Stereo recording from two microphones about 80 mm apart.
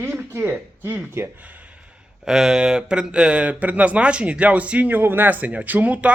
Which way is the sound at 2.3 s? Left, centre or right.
Centre.